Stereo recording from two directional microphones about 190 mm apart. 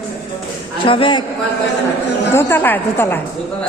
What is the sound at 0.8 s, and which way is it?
Speech, 25° left (ahead or behind).